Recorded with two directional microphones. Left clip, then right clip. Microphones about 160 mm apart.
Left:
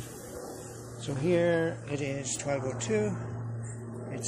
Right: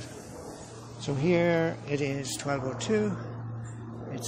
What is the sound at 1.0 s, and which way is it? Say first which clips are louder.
Speech: right 1 dB; 55° right (ahead or behind).